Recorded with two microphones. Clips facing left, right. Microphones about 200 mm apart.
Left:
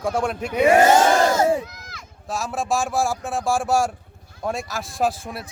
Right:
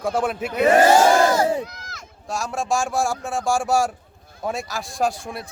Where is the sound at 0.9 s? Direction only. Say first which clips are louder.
Right 1 dB; 20° left (ahead or behind).